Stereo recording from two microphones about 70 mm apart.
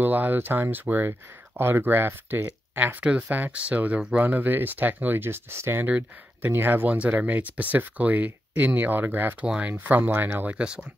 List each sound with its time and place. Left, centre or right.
0.0 s speech: right
5.9 s speech: right